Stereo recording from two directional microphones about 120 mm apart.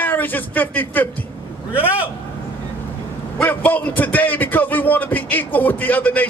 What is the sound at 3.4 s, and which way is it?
A man's voice, 15° left (ahead or behind).